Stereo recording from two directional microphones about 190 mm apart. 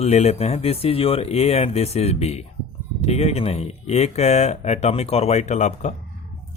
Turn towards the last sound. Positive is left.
turn(degrees=40)  # may be behind; listen again after turning